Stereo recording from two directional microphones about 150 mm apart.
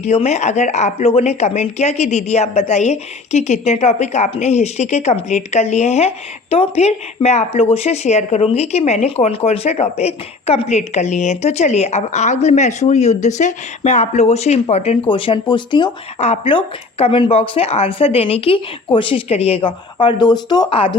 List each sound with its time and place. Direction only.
0.0 s a woman's voice: 45° left (ahead or behind)
16.2 s speech: 40° left (ahead or behind)